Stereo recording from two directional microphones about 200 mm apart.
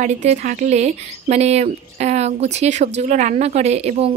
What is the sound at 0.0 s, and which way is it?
Speech, 35° right (ahead or behind).